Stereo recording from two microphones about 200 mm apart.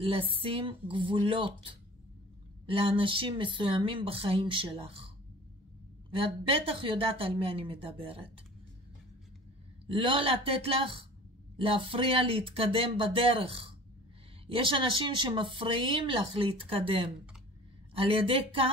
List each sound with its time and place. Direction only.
0.0 s speech: 30° right (ahead or behind)
9.8 s speech: 25° right (ahead or behind)